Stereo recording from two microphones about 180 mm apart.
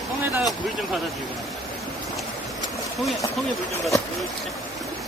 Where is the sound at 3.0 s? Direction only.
Centre (ahead or behind).